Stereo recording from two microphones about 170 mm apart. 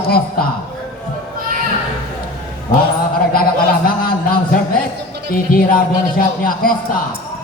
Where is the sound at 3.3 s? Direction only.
55° left (ahead or behind).